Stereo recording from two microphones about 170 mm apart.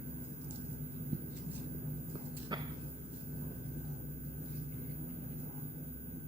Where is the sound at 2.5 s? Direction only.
25° right (ahead or behind).